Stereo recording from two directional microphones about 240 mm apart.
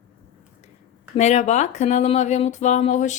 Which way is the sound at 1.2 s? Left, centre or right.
Left.